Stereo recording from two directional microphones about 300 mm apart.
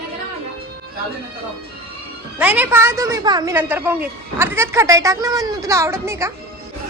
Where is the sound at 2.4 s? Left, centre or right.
Centre.